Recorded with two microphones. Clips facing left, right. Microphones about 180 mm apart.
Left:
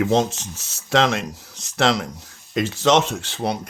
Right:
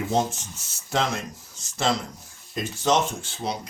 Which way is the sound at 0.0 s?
90° left.